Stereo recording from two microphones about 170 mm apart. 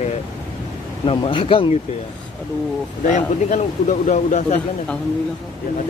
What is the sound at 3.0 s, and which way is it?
Speech, 45° left (ahead or behind).